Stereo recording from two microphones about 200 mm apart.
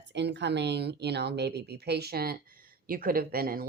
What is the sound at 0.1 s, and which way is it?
Speech, 60° right (ahead or behind).